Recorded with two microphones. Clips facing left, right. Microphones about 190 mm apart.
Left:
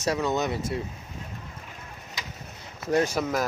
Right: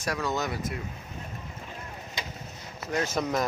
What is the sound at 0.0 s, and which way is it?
Speech, 20° left (ahead or behind).